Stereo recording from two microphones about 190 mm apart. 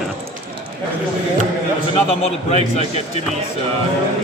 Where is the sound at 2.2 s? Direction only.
35° left (ahead or behind).